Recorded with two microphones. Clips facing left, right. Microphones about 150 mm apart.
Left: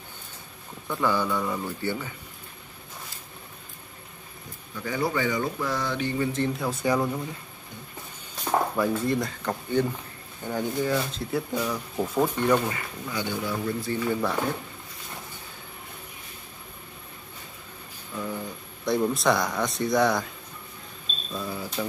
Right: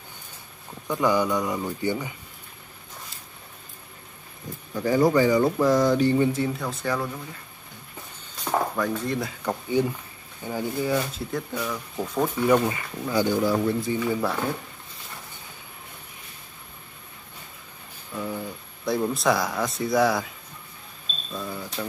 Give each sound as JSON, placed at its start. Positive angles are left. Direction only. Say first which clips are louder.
{"t": 0.8, "sound": "speech", "louder": "right 3 dB", "side_deg": -15}
{"t": 4.7, "sound": "speech", "louder": "right 8 dB", "side_deg": -40}
{"t": 6.3, "sound": "speech", "louder": "even", "side_deg": -5}
{"t": 6.6, "sound": "speech", "louder": "left 3 dB", "side_deg": 10}
{"t": 8.5, "sound": "speech", "louder": "left 1 dB", "side_deg": 5}
{"t": 9.4, "sound": "speech", "louder": "right 1 dB", "side_deg": -10}
{"t": 11.3, "sound": "speech", "louder": "left 2 dB", "side_deg": 10}
{"t": 12.4, "sound": "speech", "louder": "right 5 dB", "side_deg": -10}
{"t": 13.1, "sound": "speech", "louder": "right 8 dB", "side_deg": -35}
{"t": 13.9, "sound": "speech", "louder": "right 1 dB", "side_deg": 0}
{"t": 18.1, "sound": "a sound", "louder": "right 1 dB", "side_deg": -10}
{"t": 18.9, "sound": "speech", "louder": "even", "side_deg": 0}
{"t": 21.3, "sound": "speech", "louder": "left 1 dB", "side_deg": 0}